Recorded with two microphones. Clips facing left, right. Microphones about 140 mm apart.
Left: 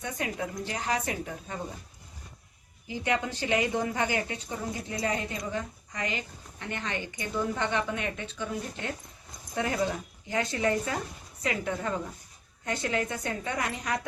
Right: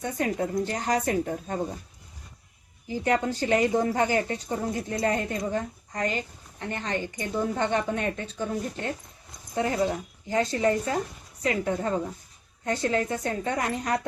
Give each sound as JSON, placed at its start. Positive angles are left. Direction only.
{"t": 0.0, "sound": "speech", "side_deg": -40}
{"t": 2.8, "sound": "a woman's voice", "side_deg": -40}